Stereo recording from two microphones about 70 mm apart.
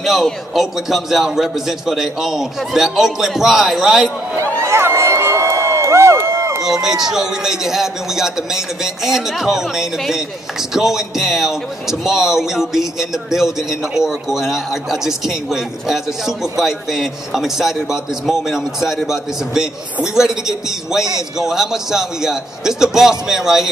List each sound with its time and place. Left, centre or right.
0.0 s a man's voice: centre
4.6 s crowd: right
6.6 s a man's voice: centre